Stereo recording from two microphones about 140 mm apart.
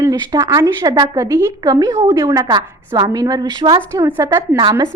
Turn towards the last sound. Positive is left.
turn(degrees=-25)  # may be behind; listen again after turning